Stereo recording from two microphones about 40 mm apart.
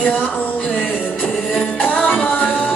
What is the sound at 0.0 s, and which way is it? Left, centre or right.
Music, left.